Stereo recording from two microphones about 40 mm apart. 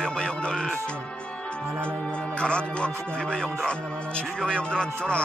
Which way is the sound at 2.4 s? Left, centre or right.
Left.